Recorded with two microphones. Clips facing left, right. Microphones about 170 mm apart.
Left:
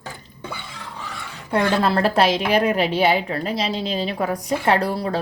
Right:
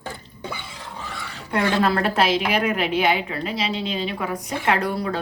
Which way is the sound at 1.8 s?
35° left (ahead or behind).